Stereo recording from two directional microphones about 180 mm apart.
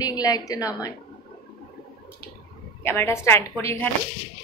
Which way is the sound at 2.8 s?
15° left (ahead or behind).